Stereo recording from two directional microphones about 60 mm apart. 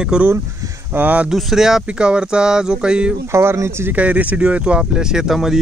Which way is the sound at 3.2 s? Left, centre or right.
Right.